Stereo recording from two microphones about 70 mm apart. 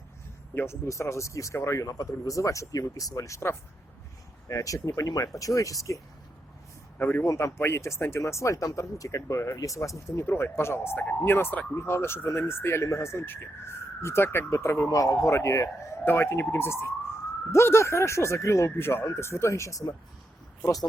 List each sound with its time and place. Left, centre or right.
0.5 s speech: left
7.0 s a man's voice: left
7.3 s speech: left
10.9 s a man's voice: left
14.8 s speech: left
16.0 s speech: left